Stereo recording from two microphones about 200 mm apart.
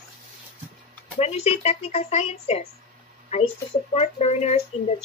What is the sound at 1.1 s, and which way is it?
Speech, 30° left (ahead or behind).